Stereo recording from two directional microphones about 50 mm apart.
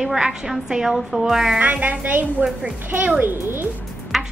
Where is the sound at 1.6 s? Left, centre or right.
Right.